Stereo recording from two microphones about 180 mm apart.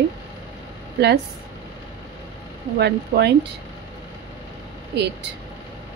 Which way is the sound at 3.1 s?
55° right (ahead or behind).